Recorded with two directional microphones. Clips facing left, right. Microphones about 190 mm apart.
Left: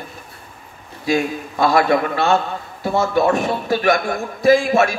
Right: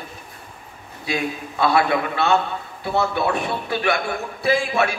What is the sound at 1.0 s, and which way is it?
A man's voice, 40° left (ahead or behind).